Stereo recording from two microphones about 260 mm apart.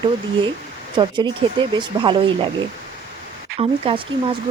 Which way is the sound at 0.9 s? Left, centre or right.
Centre.